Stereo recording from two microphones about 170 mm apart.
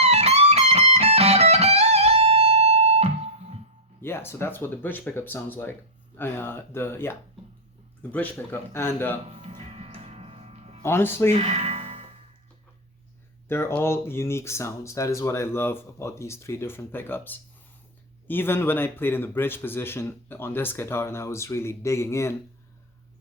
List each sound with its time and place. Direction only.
0.0 s music: 40° right (ahead or behind)
4.0 s speech: 15° left (ahead or behind)
9.4 s music: 35° right (ahead or behind)
10.8 s speech: 15° left (ahead or behind)
11.3 s music: 40° right (ahead or behind)
13.5 s speech: 15° left (ahead or behind)